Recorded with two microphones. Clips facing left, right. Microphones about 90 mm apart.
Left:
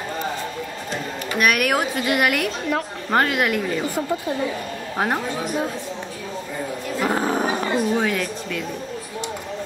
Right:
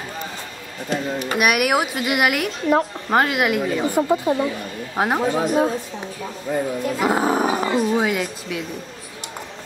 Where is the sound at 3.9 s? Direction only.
25° right (ahead or behind).